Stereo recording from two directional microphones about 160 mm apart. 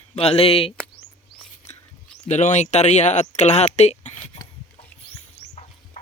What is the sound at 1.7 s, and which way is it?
Whispering, 45° left (ahead or behind).